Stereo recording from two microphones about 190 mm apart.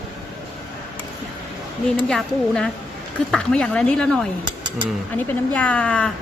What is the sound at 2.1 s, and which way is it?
Speech, 5° left (ahead or behind).